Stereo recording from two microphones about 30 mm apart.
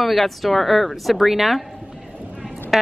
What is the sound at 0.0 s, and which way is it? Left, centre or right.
Speech, centre.